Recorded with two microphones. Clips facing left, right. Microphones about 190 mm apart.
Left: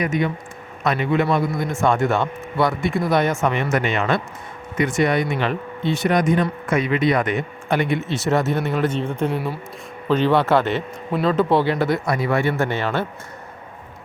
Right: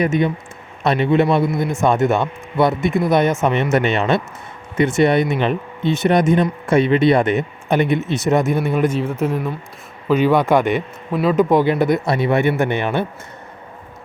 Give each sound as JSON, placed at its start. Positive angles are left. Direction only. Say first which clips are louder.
{"t": 0.0, "sound": "speech", "louder": "right 4 dB", "side_deg": -25}
{"t": 9.0, "sound": "speech", "louder": "right 2 dB", "side_deg": -5}
{"t": 10.1, "sound": "speech", "louder": "right 2 dB", "side_deg": -10}